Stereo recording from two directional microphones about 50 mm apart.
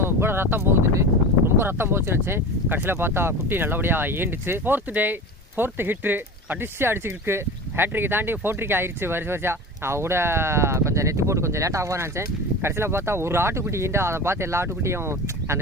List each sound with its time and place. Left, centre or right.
0.0 s speech: right